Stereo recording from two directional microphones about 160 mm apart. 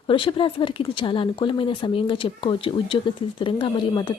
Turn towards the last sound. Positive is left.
turn(degrees=30)  # may be behind; listen again after turning